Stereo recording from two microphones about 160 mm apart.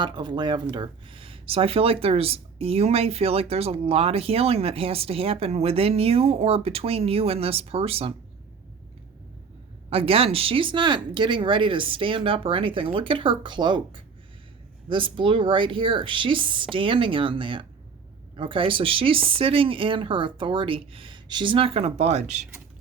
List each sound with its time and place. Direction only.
0.0 s speech: 30° right (ahead or behind)
9.9 s speech: 35° right (ahead or behind)